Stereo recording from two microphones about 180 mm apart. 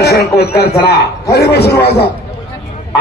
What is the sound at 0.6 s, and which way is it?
A man's voice, 60° left (ahead or behind).